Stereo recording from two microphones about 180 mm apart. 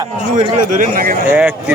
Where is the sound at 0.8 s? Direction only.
50° right (ahead or behind).